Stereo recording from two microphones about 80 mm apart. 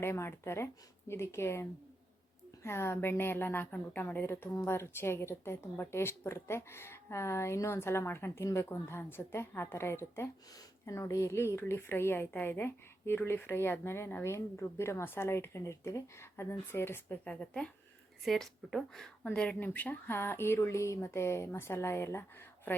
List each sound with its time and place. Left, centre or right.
0.0 s a woman's voice: left
2.6 s a woman's voice: left
17.2 s a woman's voice: centre; by 22.8 s left